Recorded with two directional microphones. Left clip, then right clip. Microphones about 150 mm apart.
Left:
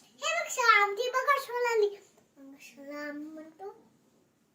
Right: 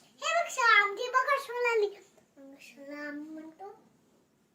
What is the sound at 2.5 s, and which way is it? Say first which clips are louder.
Child singing: left 2 dB; 15° right (ahead or behind).